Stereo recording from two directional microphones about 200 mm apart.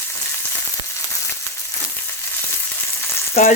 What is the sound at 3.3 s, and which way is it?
Frying, 30° left (ahead or behind).